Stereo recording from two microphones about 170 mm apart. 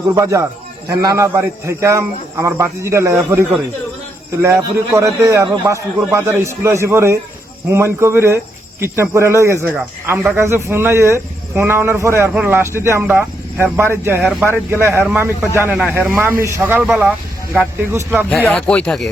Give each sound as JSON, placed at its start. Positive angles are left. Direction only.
{"t": 0.1, "sound": "a man's voice", "side_deg": -15}
{"t": 4.4, "sound": "a man's voice", "side_deg": -20}
{"t": 14.2, "sound": "speech", "side_deg": -5}
{"t": 14.4, "sound": "a man's voice", "side_deg": -15}
{"t": 18.3, "sound": "speech", "side_deg": 5}